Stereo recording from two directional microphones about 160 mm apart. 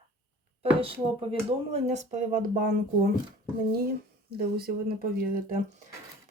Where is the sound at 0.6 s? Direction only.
35° right (ahead or behind); by 3.1 s 60° right (ahead or behind).